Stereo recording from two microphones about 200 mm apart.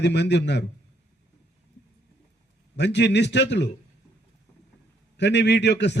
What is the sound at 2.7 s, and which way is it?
Speech, 60° left (ahead or behind).